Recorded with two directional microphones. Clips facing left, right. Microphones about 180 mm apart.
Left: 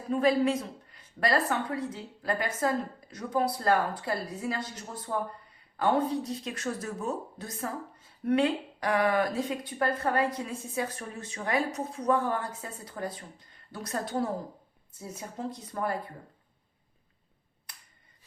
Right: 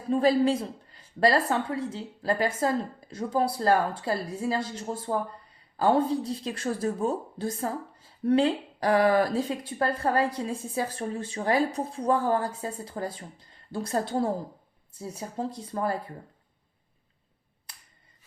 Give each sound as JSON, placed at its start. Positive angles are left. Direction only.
{"t": 0.1, "sound": "a woman's voice", "side_deg": -30}